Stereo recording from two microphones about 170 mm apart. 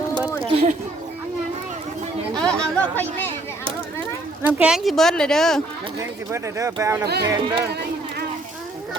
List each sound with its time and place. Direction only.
0.3 s a sound: 35° right (ahead or behind)
2.3 s chatter: 5° left (ahead or behind)
4.4 s speech: 10° right (ahead or behind)
6.0 s speech: 15° right (ahead or behind)